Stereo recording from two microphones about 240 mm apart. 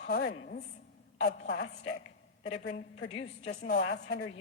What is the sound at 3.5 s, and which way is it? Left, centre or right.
Speech, left.